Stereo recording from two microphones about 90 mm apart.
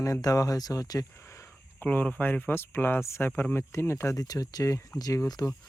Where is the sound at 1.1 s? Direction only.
30° left (ahead or behind).